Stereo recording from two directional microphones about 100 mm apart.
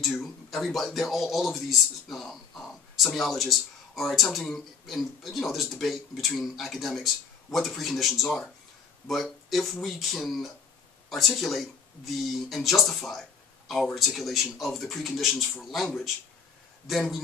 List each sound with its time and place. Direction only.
0.0 s speech: centre (ahead or behind)